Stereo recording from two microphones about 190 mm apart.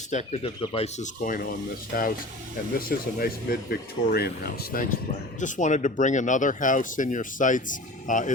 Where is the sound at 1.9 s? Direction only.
55° left (ahead or behind).